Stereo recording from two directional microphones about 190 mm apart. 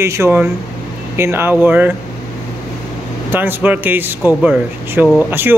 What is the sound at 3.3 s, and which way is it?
Speech, 10° right (ahead or behind).